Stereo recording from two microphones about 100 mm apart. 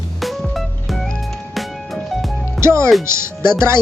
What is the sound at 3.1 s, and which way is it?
Speech, 25° right (ahead or behind).